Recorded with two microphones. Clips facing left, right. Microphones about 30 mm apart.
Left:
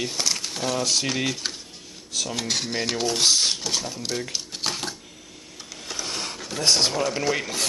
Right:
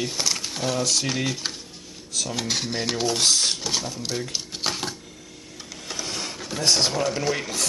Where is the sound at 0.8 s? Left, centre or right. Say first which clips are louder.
Left 1 dB; centre.